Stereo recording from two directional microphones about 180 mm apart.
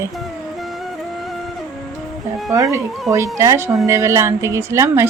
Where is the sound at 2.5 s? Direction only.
15° right (ahead or behind).